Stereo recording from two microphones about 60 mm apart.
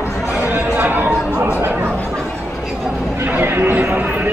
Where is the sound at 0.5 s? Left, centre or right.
Right.